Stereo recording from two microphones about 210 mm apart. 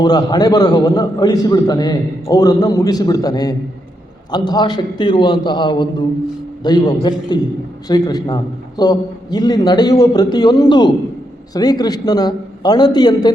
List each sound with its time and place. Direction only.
0.0 s a man's voice: 20° left (ahead or behind)